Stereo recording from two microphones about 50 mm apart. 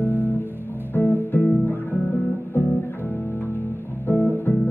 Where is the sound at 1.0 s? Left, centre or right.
Left.